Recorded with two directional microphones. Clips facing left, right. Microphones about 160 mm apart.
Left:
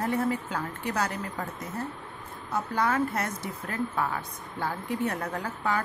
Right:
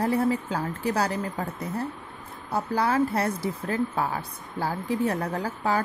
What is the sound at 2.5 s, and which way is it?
A woman's voice, 35° right (ahead or behind).